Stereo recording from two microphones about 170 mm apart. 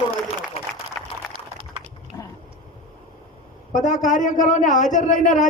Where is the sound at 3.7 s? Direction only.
45° left (ahead or behind).